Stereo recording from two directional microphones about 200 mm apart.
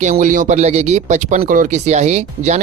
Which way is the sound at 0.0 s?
40° right (ahead or behind).